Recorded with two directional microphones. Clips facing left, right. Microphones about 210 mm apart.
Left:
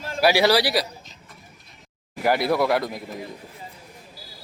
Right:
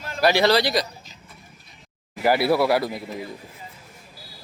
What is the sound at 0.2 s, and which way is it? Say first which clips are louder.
Speech: even; 10° left (ahead or behind).